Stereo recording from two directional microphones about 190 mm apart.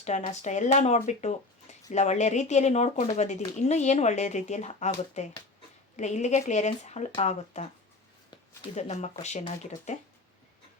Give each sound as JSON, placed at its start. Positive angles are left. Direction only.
{"t": 0.0, "sound": "speech", "side_deg": 40}
{"t": 8.7, "sound": "speech", "side_deg": 35}